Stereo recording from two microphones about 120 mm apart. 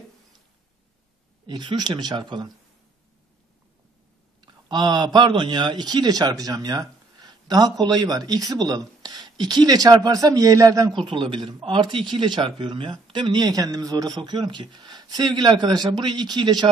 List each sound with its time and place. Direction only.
1.5 s a man's voice: 40° right (ahead or behind)
4.4 s a man's voice: 40° right (ahead or behind)
11.0 s a man's voice: 45° right (ahead or behind)